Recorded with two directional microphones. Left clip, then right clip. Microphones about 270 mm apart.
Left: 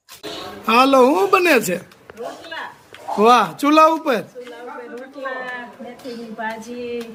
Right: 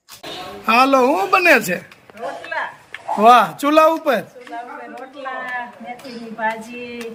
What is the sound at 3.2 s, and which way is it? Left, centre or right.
Speech, centre.